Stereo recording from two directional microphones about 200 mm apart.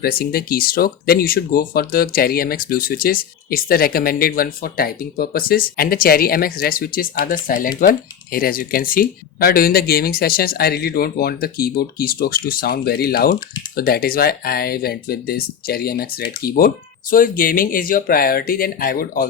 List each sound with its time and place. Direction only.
0.0 s speech: 50° left (ahead or behind)